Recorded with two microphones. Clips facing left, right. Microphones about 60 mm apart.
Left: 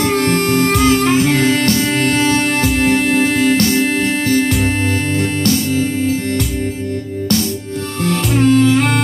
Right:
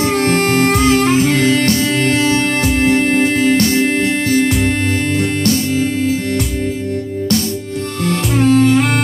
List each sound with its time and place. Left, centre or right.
0.2 s music: right
1.4 s music: left
2.6 s music: right
8.1 s music: right